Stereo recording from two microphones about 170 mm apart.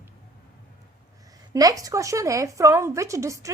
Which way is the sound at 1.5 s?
20° right (ahead or behind).